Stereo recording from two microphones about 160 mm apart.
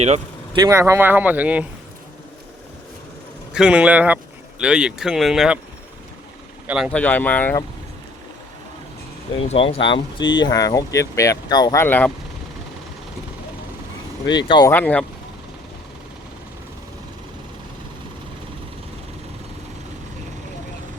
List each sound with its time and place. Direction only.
0.5 s speech: 20° right (ahead or behind)
3.5 s speech: 5° right (ahead or behind)
6.7 s speech: 5° right (ahead or behind)
6.9 s speech: 10° left (ahead or behind)
9.4 s speech: 35° left (ahead or behind); by 12.1 s 10° left (ahead or behind)
14.3 s speech: 30° left (ahead or behind)
14.7 s speech: 10° left (ahead or behind)